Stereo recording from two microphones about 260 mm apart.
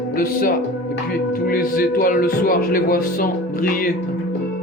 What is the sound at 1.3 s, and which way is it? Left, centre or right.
Speech, left.